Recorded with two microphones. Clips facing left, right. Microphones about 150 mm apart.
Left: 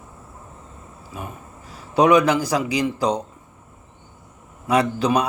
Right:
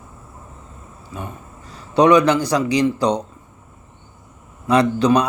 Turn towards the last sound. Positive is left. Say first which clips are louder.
# right 4 dB
turn(degrees=5)  # may be behind; listen again after turning